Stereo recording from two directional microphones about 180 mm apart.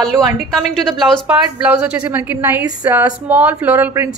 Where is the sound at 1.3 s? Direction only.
10° right (ahead or behind).